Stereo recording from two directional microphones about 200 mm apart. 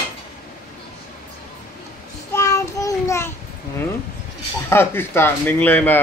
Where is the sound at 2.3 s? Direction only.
15° left (ahead or behind).